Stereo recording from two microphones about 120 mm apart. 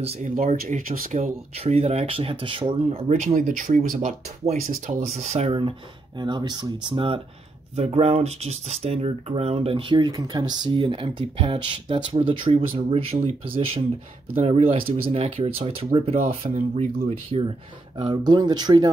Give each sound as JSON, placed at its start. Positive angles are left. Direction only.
{"t": 0.0, "sound": "speech", "side_deg": -65}
{"t": 3.1, "sound": "speech", "side_deg": -85}
{"t": 5.6, "sound": "speech", "side_deg": -40}
{"t": 7.7, "sound": "speech", "side_deg": -60}
{"t": 16.4, "sound": "speech", "side_deg": -80}
{"t": 17.3, "sound": "speech", "side_deg": -50}
{"t": 18.1, "sound": "speech", "side_deg": -35}